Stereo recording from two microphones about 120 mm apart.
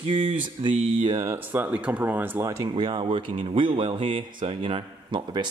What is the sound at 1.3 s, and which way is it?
Speech, 15° right (ahead or behind).